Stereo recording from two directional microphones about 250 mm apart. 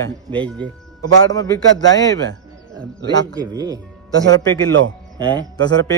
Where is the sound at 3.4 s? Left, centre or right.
Centre.